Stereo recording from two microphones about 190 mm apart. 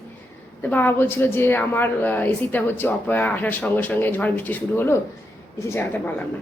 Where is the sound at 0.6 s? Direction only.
10° left (ahead or behind).